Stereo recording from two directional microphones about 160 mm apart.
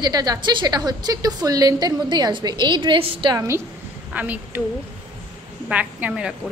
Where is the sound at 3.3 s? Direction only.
20° right (ahead or behind).